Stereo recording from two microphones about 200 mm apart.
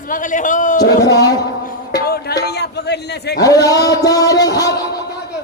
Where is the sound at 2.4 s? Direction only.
55° left (ahead or behind).